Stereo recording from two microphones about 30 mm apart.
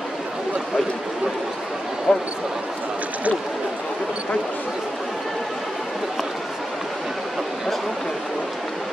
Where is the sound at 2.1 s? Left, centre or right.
Left.